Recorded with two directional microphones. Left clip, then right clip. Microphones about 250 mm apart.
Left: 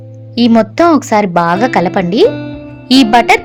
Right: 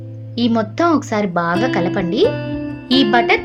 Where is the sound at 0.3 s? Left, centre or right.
Left.